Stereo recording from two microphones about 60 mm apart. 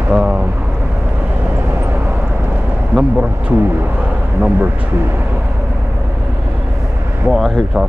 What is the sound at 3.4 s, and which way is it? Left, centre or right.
Speech, right.